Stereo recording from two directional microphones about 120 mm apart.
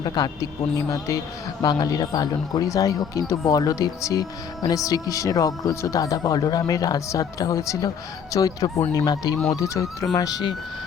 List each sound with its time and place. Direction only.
0.0 s speech: 35° left (ahead or behind)